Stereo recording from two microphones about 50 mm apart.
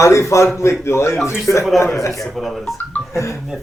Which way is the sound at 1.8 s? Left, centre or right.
Left.